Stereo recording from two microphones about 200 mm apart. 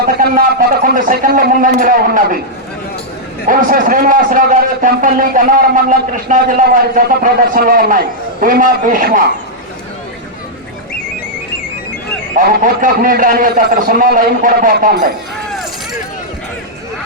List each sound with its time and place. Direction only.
0.0 s speech: 50° right (ahead or behind)
3.4 s a man's voice: 40° right (ahead or behind)
12.6 s a man's voice: 45° right (ahead or behind)